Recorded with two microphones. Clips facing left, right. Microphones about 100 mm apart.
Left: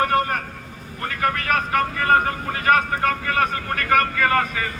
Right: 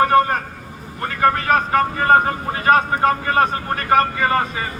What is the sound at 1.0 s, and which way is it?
A man's voice, 30° right (ahead or behind).